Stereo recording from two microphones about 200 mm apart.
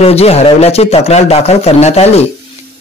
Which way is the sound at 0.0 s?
30° left (ahead or behind).